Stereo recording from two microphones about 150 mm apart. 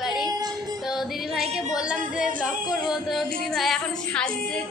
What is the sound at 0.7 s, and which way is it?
Speech, centre (ahead or behind).